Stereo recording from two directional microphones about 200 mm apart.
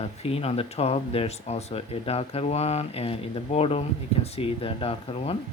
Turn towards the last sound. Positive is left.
turn(degrees=30)  # may be behind; listen again after turning